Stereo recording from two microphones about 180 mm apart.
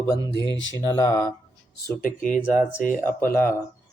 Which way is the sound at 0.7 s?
20° left (ahead or behind).